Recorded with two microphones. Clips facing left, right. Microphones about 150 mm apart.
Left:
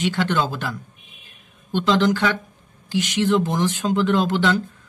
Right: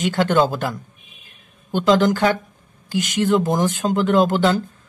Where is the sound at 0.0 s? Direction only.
45° right (ahead or behind).